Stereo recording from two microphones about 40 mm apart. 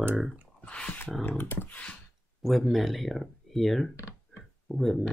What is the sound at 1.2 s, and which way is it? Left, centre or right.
Speech, left.